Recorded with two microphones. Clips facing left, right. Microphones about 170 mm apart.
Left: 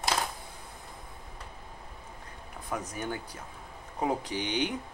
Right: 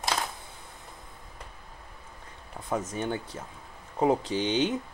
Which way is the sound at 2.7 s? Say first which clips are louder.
Right 5 dB; 25° right (ahead or behind).